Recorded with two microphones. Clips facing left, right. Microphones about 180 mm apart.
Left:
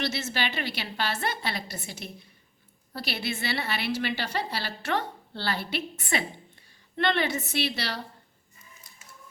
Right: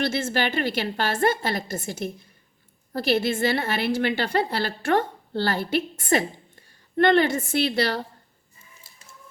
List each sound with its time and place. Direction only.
0.0 s a woman's voice: 50° right (ahead or behind)